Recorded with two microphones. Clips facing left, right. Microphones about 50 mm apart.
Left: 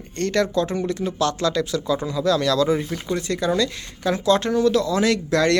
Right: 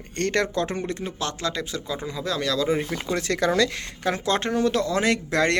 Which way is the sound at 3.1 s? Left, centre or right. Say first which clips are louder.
Left 1 dB; right.